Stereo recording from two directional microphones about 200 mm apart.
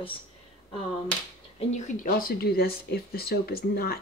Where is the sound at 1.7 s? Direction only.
40° left (ahead or behind).